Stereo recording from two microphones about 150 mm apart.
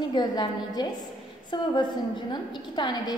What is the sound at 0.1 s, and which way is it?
Speech, 30° left (ahead or behind).